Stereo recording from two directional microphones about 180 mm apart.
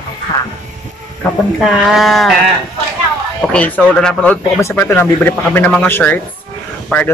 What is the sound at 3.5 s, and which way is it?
Speech, 5° left (ahead or behind).